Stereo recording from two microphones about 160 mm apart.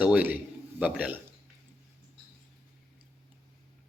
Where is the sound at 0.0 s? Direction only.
10° right (ahead or behind).